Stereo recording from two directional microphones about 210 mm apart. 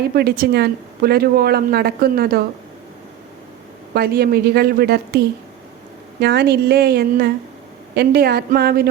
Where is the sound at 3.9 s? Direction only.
45° right (ahead or behind).